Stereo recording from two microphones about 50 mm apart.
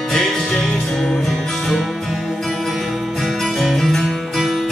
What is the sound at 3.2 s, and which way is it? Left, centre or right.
Music, centre.